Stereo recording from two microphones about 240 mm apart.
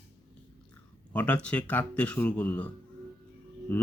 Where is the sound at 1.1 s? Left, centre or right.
Centre.